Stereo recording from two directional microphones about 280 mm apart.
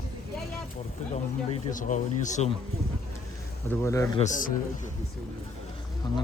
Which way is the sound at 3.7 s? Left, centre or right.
Centre.